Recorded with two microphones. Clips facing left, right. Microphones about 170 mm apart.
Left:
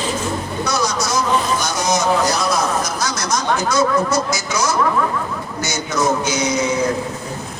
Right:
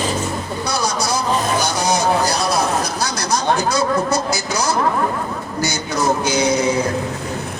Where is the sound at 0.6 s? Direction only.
30° right (ahead or behind).